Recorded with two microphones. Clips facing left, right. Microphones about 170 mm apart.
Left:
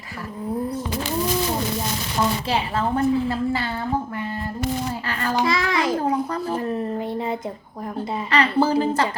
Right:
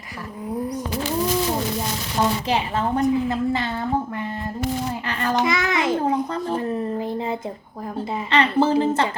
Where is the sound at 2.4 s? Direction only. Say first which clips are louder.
Right 1 dB; 20° right (ahead or behind).